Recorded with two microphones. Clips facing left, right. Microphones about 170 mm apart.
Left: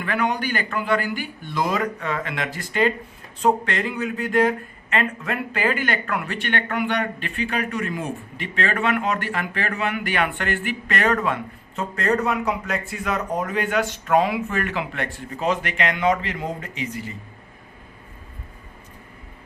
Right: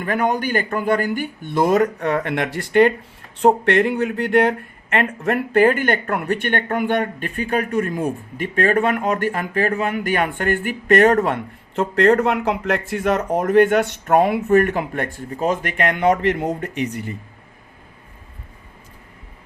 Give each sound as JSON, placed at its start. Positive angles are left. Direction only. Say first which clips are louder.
{"t": 0.0, "sound": "speech", "louder": "right 4 dB", "side_deg": -45}
{"t": 11.7, "sound": "speech", "louder": "right 8 dB", "side_deg": -70}